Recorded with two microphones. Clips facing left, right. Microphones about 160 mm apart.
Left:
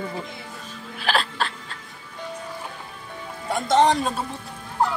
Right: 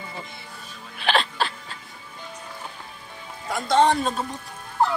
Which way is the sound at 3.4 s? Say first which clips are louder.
Left 1 dB; 25° left (ahead or behind).